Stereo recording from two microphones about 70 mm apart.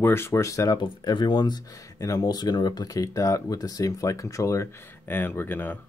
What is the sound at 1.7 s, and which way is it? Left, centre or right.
Speech, left.